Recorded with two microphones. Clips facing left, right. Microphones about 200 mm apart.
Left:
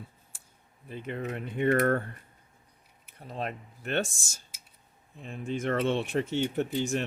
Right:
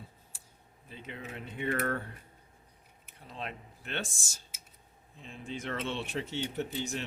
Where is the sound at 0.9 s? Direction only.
55° left (ahead or behind).